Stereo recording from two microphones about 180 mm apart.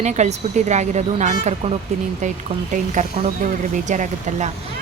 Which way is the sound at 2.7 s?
45° right (ahead or behind).